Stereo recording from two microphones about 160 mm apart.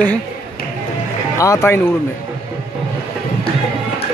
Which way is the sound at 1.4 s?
20° left (ahead or behind).